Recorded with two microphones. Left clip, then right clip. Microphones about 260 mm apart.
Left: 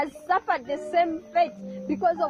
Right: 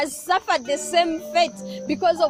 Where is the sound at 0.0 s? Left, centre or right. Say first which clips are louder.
Right 3 dB; right.